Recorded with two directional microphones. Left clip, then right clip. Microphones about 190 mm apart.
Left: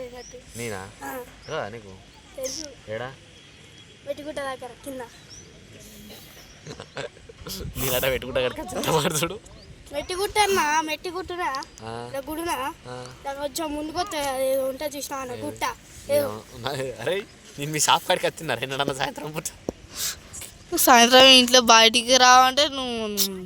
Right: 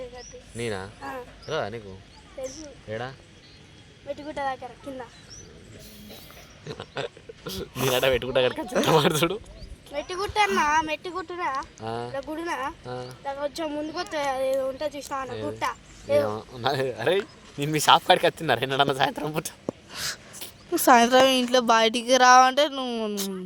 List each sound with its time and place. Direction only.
0.6 s speech: 55° right (ahead or behind)
2.9 s speech: 60° right (ahead or behind)
4.1 s speech: 25° left (ahead or behind)
6.7 s speech: 60° right (ahead or behind)
9.9 s speech: 35° left (ahead or behind)
11.8 s speech: 60° right (ahead or behind)
12.1 s speech: 30° left (ahead or behind)
12.8 s speech: 60° right (ahead or behind)
13.2 s a child's voice: 30° left (ahead or behind)
16.2 s speech: 55° right (ahead or behind)
19.9 s a sound: 20° right (ahead or behind)
20.7 s speech: 10° right (ahead or behind)